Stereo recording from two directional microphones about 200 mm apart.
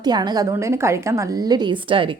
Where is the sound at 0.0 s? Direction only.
20° right (ahead or behind).